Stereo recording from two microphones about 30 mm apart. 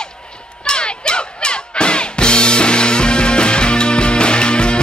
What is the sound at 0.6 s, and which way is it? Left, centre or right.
Music, left.